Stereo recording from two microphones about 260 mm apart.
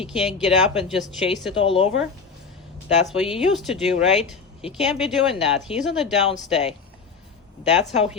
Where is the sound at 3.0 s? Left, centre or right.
Centre.